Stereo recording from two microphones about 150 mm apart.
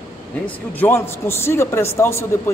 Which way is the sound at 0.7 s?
15° left (ahead or behind).